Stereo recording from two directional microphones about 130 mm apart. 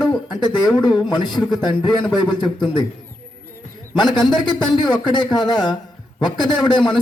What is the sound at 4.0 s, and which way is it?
A man's voice, 35° left (ahead or behind).